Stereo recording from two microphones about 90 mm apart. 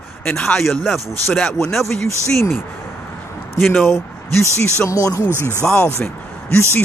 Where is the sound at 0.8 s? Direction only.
5° right (ahead or behind).